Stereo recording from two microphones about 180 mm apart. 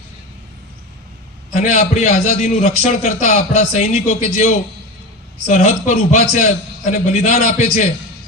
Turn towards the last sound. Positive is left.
turn(degrees=45)  # may be behind; listen again after turning